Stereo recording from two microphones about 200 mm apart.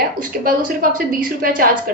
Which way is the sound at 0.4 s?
45° right (ahead or behind).